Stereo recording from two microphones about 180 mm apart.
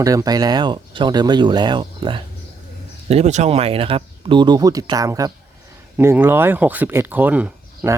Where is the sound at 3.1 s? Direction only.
40° right (ahead or behind).